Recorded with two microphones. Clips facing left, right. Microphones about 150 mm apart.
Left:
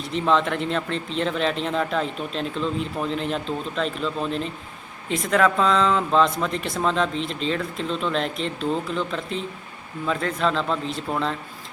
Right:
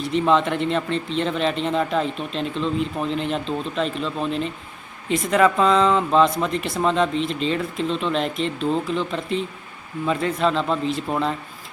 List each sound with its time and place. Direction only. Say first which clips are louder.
0.0 s speech: right 3 dB; centre (ahead or behind)